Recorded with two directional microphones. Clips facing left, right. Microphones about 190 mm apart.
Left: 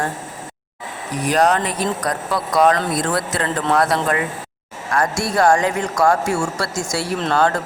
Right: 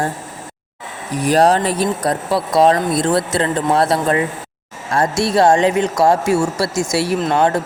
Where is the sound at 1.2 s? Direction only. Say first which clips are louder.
Right 4 dB; 30° right (ahead or behind).